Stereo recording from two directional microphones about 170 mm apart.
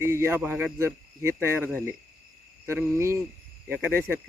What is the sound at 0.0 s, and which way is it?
Speech, 15° right (ahead or behind).